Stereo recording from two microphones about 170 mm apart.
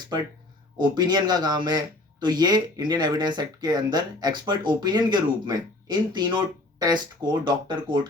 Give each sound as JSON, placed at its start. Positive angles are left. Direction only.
{"t": 0.8, "sound": "speech", "side_deg": -25}